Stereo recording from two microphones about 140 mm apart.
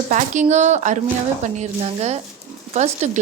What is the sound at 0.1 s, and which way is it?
A woman's voice, 60° right (ahead or behind).